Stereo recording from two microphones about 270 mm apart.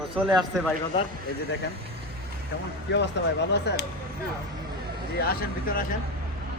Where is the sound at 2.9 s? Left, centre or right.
Left.